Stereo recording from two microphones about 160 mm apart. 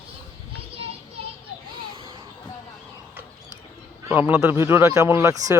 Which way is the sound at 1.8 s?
35° right (ahead or behind).